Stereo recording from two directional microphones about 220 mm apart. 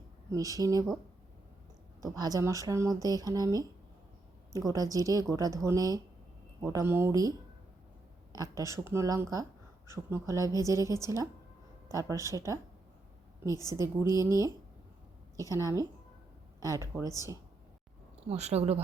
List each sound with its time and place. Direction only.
0.3 s speech: 15° right (ahead or behind)
2.0 s speech: 15° right (ahead or behind)
13.7 s speech: 15° right (ahead or behind)
18.2 s a woman's voice: 30° right (ahead or behind)